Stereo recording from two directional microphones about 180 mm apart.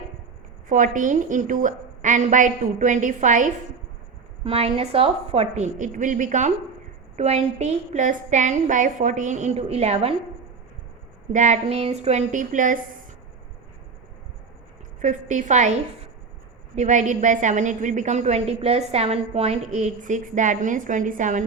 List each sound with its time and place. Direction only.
0.7 s a woman's voice: 45° right (ahead or behind)
4.4 s a woman's voice: 30° right (ahead or behind)
11.3 s a woman's voice: 45° right (ahead or behind)
15.0 s a woman's voice: 40° right (ahead or behind)
16.7 s a woman's voice: 40° right (ahead or behind)